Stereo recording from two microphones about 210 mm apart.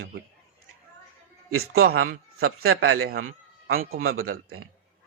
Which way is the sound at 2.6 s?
75° right (ahead or behind).